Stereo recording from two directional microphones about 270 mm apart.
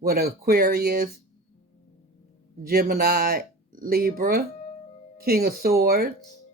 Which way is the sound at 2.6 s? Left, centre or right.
Right.